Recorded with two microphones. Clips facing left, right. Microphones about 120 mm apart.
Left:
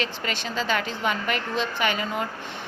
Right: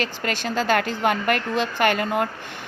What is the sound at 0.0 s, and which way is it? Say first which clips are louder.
Speech: right 3 dB; 50° right (ahead or behind).